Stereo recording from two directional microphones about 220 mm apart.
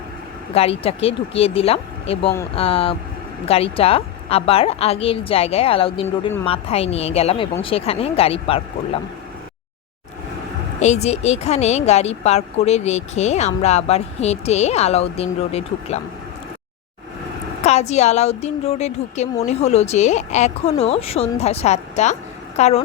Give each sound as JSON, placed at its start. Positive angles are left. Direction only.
{"t": 0.5, "sound": "speech", "side_deg": 25}
{"t": 10.8, "sound": "speech", "side_deg": 30}
{"t": 17.6, "sound": "a woman's voice", "side_deg": 30}